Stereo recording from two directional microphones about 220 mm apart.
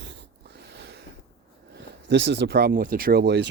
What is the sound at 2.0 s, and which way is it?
Speech, 55° right (ahead or behind).